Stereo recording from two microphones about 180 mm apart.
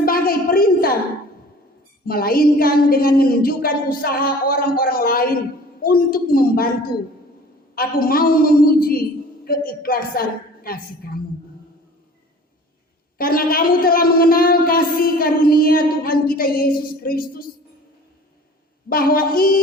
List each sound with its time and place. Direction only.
0.0 s a sound: 55° left (ahead or behind)
2.0 s speech: 55° left (ahead or behind)
7.8 s speech: 55° left (ahead or behind)
13.1 s speech: 55° left (ahead or behind)
18.9 s a woman's voice: 55° left (ahead or behind)